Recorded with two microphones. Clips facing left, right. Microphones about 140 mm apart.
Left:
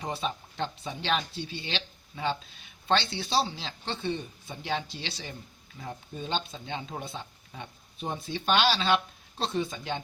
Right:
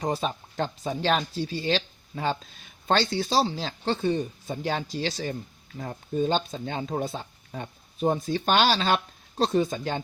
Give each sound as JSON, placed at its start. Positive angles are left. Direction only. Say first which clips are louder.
{"t": 0.0, "sound": "speech", "louder": "right 5 dB", "side_deg": -40}